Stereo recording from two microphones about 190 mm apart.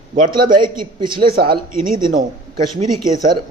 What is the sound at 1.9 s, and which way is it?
Speech, 45° right (ahead or behind).